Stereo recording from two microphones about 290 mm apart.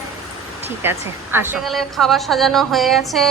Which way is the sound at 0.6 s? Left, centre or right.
Centre.